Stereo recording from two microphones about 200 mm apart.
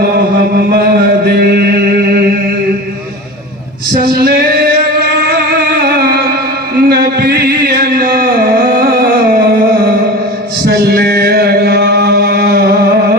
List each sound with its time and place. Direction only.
0.5 s chant: 50° right (ahead or behind)
3.9 s singing: 45° right (ahead or behind)
6.7 s a sound: 50° right (ahead or behind)
10.7 s chant: 55° right (ahead or behind)